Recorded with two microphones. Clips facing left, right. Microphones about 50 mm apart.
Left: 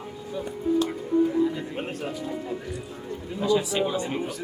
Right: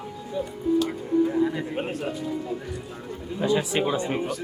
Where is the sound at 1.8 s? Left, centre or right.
Centre.